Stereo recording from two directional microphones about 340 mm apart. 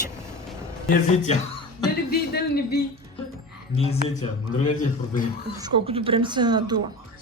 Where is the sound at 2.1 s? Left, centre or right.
Left.